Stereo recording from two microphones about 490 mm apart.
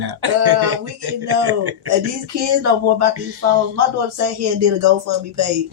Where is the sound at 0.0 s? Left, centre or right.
Right.